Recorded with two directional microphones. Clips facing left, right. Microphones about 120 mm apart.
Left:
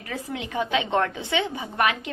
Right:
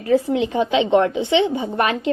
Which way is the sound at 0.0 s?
30° right (ahead or behind).